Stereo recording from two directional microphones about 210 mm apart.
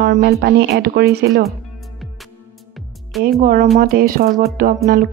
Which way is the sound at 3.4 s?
35° right (ahead or behind).